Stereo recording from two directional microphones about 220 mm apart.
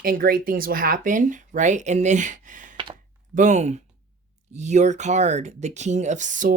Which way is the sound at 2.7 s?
20° right (ahead or behind).